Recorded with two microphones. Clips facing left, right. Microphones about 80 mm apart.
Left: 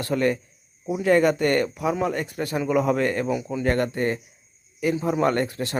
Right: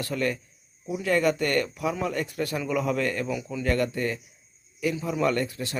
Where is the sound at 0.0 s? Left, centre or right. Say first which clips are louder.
Left 5 dB; left.